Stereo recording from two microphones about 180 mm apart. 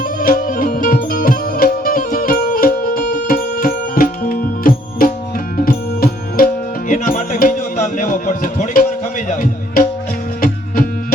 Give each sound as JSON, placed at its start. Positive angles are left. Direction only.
{"t": 0.0, "sound": "music", "side_deg": 50}